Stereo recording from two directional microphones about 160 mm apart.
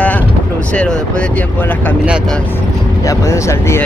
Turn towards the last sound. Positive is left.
turn(degrees=15)  # may be behind; listen again after turning